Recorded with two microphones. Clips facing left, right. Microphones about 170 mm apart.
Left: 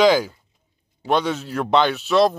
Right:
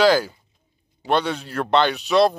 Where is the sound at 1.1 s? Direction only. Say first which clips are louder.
Left 1 dB; 5° left (ahead or behind).